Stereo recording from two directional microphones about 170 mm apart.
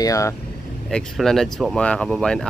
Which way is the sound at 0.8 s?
Centre (ahead or behind).